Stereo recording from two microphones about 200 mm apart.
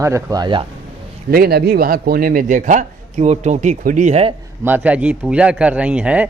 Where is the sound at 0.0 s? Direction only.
15° right (ahead or behind).